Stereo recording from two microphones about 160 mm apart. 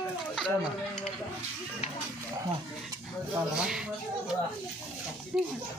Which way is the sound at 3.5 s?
5° right (ahead or behind).